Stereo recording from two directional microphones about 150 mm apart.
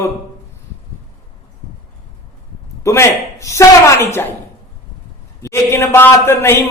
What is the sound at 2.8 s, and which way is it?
A woman's voice, 20° left (ahead or behind).